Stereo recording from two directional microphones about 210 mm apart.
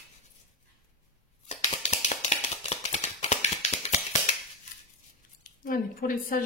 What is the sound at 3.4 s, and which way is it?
Finger snapping, 30° left (ahead or behind).